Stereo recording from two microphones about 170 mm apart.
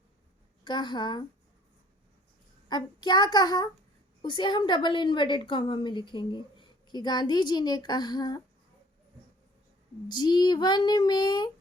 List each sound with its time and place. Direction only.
0.6 s a woman's voice: 25° left (ahead or behind)
2.6 s a woman's voice: 25° left (ahead or behind)
10.1 s a woman's voice: 25° left (ahead or behind)